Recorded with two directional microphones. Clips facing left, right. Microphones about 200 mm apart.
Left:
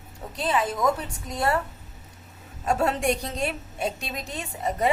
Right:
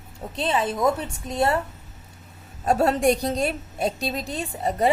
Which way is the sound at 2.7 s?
35° right (ahead or behind).